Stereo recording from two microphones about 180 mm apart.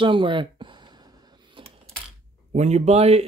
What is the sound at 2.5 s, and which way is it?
Speech, 40° right (ahead or behind).